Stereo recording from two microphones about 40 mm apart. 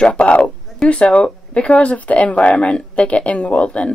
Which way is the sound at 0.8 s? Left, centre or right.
Centre.